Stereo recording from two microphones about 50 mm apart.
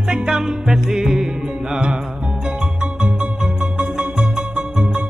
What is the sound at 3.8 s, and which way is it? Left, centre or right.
Music, right.